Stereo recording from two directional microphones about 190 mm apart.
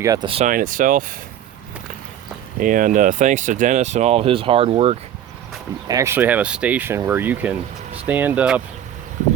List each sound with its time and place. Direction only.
0.0 s speech: 20° right (ahead or behind)
0.4 s speech: 45° right (ahead or behind)
2.6 s speech: 45° right (ahead or behind)
5.9 s speech: 15° right (ahead or behind)